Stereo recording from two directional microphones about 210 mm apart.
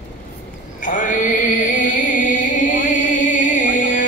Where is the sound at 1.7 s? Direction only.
40° left (ahead or behind).